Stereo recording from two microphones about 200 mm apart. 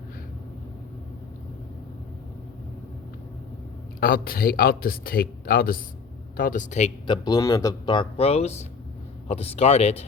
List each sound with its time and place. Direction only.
4.0 s speech: 45° left (ahead or behind)
7.1 s speech: 20° left (ahead or behind)